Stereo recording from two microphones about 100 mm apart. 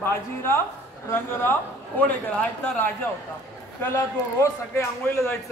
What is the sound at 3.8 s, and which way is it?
A man's voice, 25° left (ahead or behind).